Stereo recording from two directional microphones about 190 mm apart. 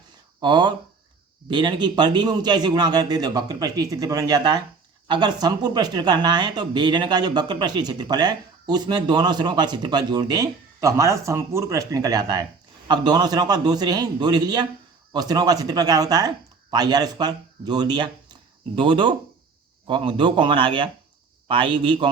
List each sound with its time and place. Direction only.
0.3 s speech: 25° right (ahead or behind)